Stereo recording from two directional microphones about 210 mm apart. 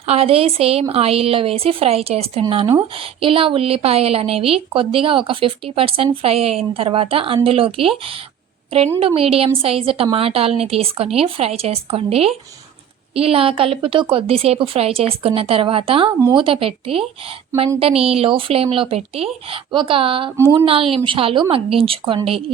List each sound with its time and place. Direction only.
0.0 s a woman's voice: 30° right (ahead or behind)
20.3 s speech: 10° right (ahead or behind)
20.9 s a woman's voice: 25° right (ahead or behind)